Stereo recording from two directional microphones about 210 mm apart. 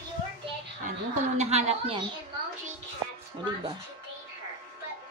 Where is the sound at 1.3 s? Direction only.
30° right (ahead or behind).